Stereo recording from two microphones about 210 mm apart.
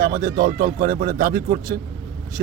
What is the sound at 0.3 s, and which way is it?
Speech, 40° right (ahead or behind).